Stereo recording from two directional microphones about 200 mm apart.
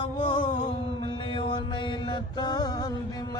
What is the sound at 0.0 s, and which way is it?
Music, 25° left (ahead or behind).